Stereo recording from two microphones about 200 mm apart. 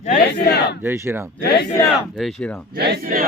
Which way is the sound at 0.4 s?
55° left (ahead or behind).